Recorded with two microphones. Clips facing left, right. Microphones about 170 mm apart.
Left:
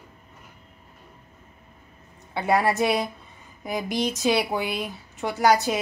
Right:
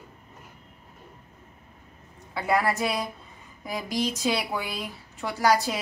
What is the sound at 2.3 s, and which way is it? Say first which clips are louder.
Speech: left 3 dB; 25° left (ahead or behind).